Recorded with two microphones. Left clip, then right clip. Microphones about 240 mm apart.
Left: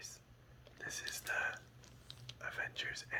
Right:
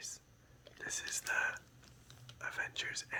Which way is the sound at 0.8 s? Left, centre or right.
Centre.